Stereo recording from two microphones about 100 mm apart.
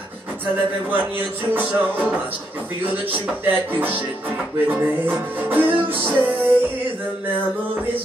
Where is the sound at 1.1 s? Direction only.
20° right (ahead or behind).